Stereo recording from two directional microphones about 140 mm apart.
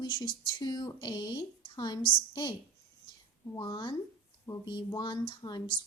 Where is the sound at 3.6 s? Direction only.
30° left (ahead or behind).